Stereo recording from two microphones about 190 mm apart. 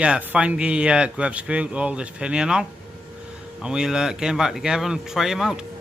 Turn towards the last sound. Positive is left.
turn(degrees=0)  # may be behind; listen again after turning